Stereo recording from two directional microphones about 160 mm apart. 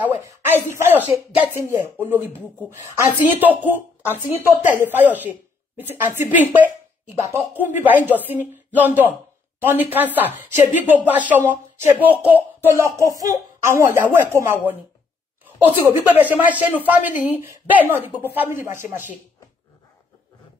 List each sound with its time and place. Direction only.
0.0 s a woman's voice: 10° right (ahead or behind)
16.0 s a woman's voice: 10° right (ahead or behind)